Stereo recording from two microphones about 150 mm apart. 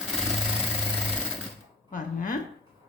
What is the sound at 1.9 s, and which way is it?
Speech, 65° left (ahead or behind).